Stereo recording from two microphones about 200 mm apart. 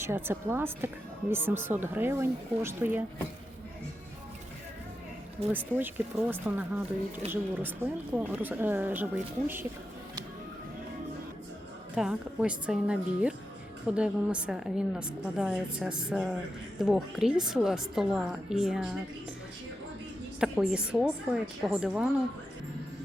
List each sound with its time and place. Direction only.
0.0 s speech: 10° right (ahead or behind)
5.5 s speech: 10° right (ahead or behind)
11.9 s a woman's voice: 5° right (ahead or behind)
20.4 s a woman's voice: 5° right (ahead or behind)